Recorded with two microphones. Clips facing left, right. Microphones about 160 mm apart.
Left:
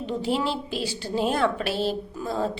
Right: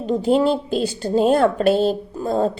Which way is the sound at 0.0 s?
45° right (ahead or behind).